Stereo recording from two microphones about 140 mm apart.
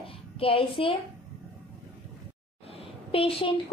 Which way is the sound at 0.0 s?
40° left (ahead or behind).